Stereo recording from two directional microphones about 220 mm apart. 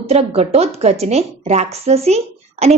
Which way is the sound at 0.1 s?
30° right (ahead or behind).